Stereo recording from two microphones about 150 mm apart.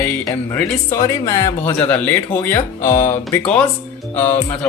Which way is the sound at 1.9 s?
10° left (ahead or behind).